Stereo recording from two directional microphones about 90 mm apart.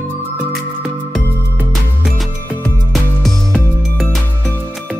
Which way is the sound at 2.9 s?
5° left (ahead or behind).